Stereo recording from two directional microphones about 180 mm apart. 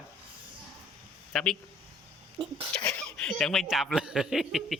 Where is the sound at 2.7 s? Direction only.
5° left (ahead or behind).